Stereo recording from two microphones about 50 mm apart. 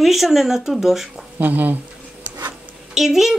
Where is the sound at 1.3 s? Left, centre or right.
Right.